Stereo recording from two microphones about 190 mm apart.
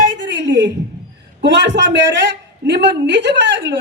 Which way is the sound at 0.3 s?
70° right (ahead or behind).